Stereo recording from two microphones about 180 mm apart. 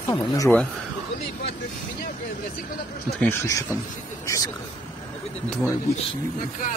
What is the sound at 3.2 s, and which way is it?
Speech, 15° left (ahead or behind).